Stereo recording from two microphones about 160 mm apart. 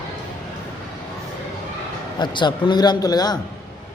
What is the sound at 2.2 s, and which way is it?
A man's voice, 30° left (ahead or behind).